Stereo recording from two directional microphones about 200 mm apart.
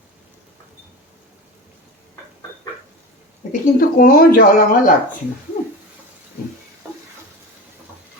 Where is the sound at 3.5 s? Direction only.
45° left (ahead or behind).